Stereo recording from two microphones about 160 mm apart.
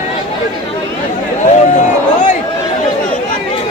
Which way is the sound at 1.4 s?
50° left (ahead or behind).